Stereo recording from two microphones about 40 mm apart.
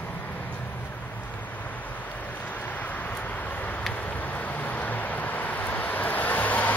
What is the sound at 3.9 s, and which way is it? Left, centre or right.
Vehicle, left.